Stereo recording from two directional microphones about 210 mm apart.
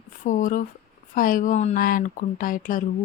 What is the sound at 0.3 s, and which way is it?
Speech, 40° left (ahead or behind).